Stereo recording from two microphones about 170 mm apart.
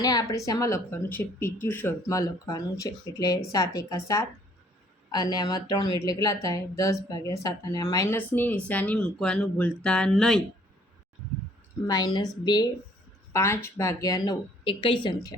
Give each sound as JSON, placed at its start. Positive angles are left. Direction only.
{"t": 0.0, "sound": "a woman's voice", "side_deg": 20}
{"t": 11.9, "sound": "a woman's voice", "side_deg": 20}
{"t": 14.6, "sound": "a woman's voice", "side_deg": 30}